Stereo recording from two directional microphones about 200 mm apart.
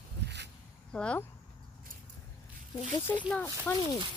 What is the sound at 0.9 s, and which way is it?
Speech, 5° left (ahead or behind).